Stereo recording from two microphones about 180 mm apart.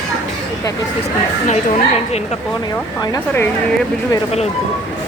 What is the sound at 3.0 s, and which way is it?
Speech, 20° left (ahead or behind).